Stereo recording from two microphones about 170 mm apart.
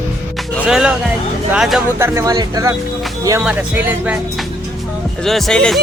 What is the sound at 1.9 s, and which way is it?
Speech, 15° right (ahead or behind).